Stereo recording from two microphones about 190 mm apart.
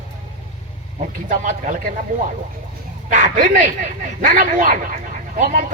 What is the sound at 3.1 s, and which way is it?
A man's voice, 40° right (ahead or behind).